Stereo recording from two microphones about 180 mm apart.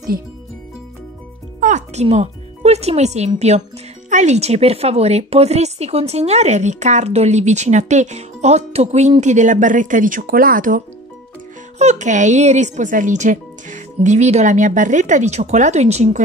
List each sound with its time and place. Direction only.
1.6 s speech: 40° right (ahead or behind)
11.8 s speech: 40° right (ahead or behind)